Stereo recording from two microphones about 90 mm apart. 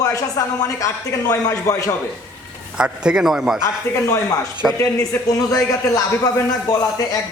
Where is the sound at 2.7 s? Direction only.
10° right (ahead or behind).